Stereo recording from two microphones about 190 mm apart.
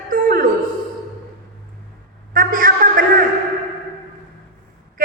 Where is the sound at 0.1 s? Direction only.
50° right (ahead or behind).